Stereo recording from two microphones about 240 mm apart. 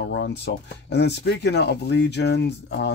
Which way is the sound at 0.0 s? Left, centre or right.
Left.